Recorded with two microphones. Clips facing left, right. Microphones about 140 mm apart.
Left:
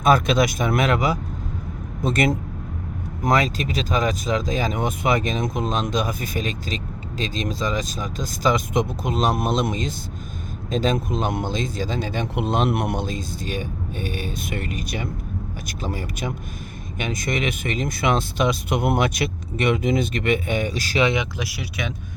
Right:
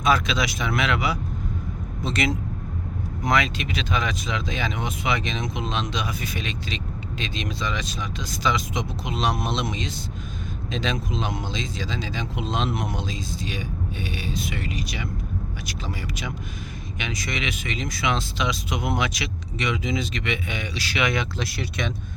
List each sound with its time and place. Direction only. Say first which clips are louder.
0.0 s speech: left 5 dB; 50° left (ahead or behind)
21.1 s speech: left 2 dB; 15° left (ahead or behind)